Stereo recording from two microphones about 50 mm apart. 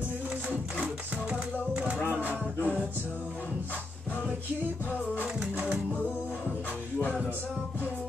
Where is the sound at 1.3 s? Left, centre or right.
Right.